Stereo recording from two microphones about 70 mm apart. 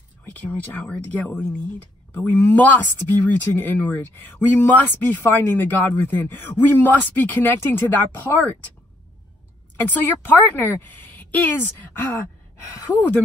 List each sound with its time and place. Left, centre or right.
0.2 s speech: left
9.8 s speech: left